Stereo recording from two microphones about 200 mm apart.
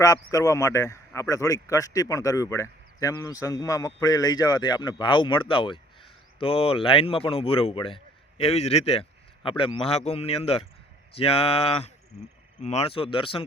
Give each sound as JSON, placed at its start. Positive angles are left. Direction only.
{"t": 0.0, "sound": "a man's voice", "side_deg": 15}